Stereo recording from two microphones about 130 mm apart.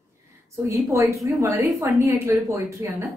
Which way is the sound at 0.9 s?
20° right (ahead or behind).